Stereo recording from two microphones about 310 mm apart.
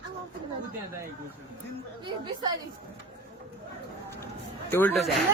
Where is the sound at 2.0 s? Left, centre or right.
Centre.